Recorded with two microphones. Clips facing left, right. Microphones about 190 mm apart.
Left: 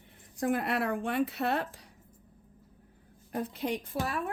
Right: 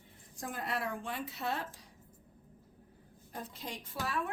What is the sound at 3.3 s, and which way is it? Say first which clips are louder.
Speech: left 11 dB; 65° left (ahead or behind).